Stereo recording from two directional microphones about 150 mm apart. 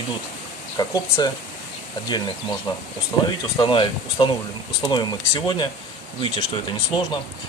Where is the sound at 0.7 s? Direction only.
25° left (ahead or behind).